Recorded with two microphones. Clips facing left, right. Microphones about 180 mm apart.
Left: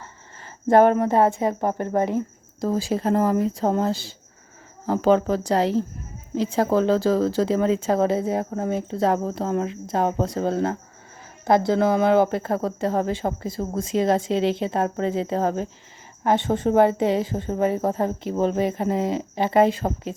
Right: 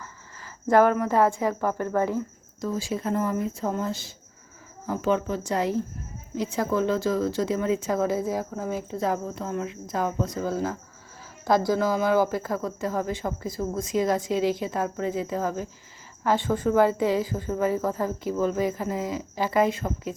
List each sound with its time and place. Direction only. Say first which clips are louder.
0.0 s speech: left 1 dB; 25° left (ahead or behind)
2.6 s speech: left 5 dB; 35° left (ahead or behind)
3.1 s a woman's voice: left 6 dB; 85° left
5.4 s speech: left 5 dB; 35° left (ahead or behind)
10.4 s speech: left 4 dB; 65° left (ahead or behind)
13.0 s speech: left 4 dB; 30° left (ahead or behind)